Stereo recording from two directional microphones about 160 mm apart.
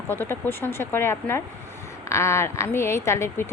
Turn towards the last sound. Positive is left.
turn(degrees=15)  # may be behind; listen again after turning